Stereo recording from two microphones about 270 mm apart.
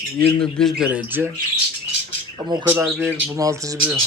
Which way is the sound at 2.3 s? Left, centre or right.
Centre.